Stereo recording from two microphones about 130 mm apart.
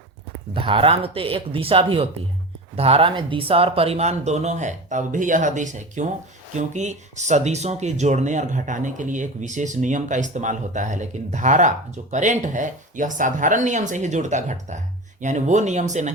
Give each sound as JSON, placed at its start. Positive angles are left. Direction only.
{"t": 0.5, "sound": "speech", "side_deg": -45}